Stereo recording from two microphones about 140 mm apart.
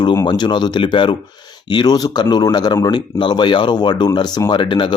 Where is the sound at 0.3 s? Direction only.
30° left (ahead or behind).